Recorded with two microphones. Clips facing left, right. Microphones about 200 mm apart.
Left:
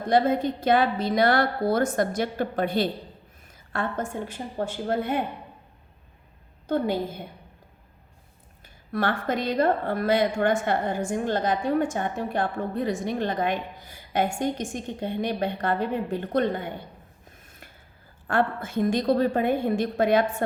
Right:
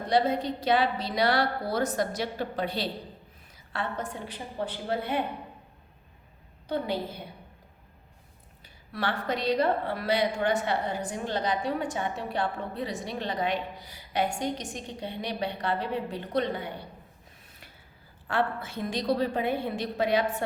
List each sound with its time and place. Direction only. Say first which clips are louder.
0.1 s a woman's voice: left 4 dB; 50° left (ahead or behind)
6.7 s a woman's voice: left 5 dB; 50° left (ahead or behind)
8.6 s a woman's voice: left 5 dB; 50° left (ahead or behind)
18.3 s a woman's voice: left 4 dB; 50° left (ahead or behind)